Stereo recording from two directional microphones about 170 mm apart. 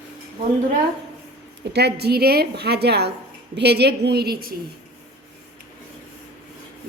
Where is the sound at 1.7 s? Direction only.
75° right (ahead or behind).